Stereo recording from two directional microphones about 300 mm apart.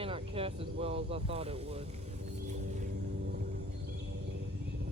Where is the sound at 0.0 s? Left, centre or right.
Centre.